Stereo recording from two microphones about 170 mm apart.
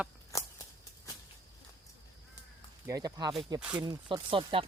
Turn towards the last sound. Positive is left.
turn(degrees=-30)  # may be behind; listen again after turning